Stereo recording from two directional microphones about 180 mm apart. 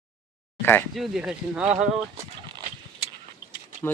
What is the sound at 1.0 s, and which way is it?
Speech, 5° right (ahead or behind).